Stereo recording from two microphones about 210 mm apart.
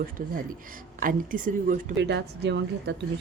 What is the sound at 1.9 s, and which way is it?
Speech, 55° right (ahead or behind).